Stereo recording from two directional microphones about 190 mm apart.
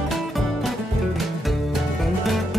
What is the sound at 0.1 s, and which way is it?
Music, centre (ahead or behind).